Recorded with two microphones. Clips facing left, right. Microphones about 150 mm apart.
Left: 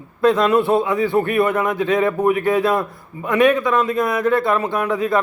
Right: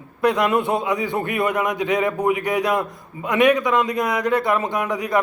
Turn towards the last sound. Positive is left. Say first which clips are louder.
# left 4 dB
turn(degrees=-20)  # may be behind; listen again after turning